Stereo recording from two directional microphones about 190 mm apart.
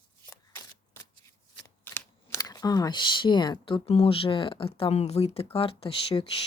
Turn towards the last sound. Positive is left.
turn(degrees=30)  # may be behind; listen again after turning